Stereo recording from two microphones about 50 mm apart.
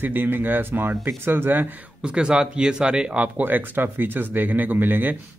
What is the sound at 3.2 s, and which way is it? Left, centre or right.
A man's voice, right.